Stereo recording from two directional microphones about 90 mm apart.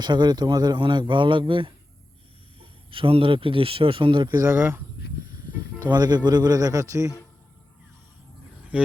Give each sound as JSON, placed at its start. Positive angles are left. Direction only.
{"t": 0.0, "sound": "a man's voice", "side_deg": -55}
{"t": 2.6, "sound": "speech", "side_deg": -85}
{"t": 4.4, "sound": "speech", "side_deg": -25}
{"t": 5.8, "sound": "speech", "side_deg": -50}
{"t": 8.7, "sound": "speech", "side_deg": -15}